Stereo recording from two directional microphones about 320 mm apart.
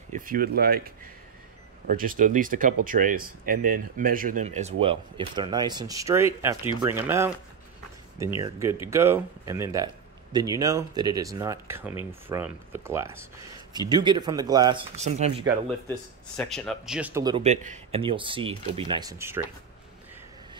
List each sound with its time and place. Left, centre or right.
0.1 s speech: right; by 7.3 s centre
8.4 s speech: centre
15.9 s speech: centre